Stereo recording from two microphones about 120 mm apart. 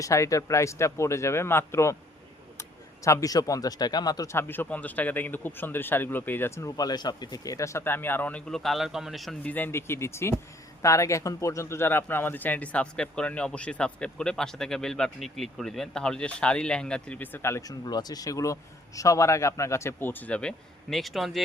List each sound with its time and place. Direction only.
0.0 s speech: 25° left (ahead or behind)
4.4 s speech: 15° left (ahead or behind); by 9.4 s centre (ahead or behind)
9.4 s speech: 15° left (ahead or behind)